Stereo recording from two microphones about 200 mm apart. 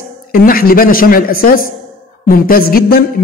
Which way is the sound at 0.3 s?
45° left (ahead or behind).